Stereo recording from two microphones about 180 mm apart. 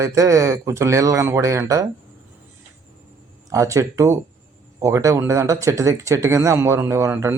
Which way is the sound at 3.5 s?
15° right (ahead or behind).